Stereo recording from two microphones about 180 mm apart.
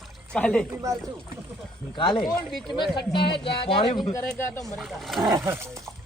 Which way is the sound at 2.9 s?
25° left (ahead or behind).